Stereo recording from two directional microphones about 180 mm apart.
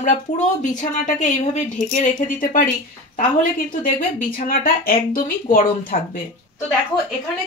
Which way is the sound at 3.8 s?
50° left (ahead or behind).